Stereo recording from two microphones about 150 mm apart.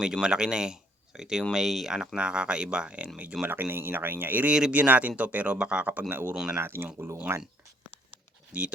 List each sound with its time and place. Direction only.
0.0 s speech: 5° right (ahead or behind)
6.6 s speech: 15° right (ahead or behind)
8.5 s speech: 10° right (ahead or behind)